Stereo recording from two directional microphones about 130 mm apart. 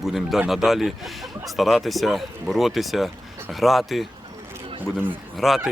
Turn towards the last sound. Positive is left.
turn(degrees=0)  # may be behind; listen again after turning